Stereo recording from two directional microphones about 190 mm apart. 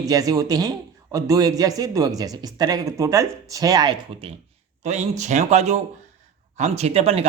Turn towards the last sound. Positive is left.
turn(degrees=-30)  # may be behind; listen again after turning